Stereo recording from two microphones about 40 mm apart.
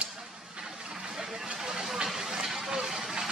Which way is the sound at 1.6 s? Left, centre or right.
Centre.